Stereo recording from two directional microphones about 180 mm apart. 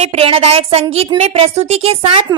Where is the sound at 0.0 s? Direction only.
35° right (ahead or behind).